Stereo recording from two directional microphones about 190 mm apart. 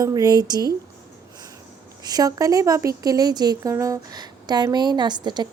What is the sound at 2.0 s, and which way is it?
A woman's voice, 20° right (ahead or behind).